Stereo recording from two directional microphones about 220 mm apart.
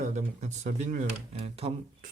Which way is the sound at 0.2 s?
35° right (ahead or behind).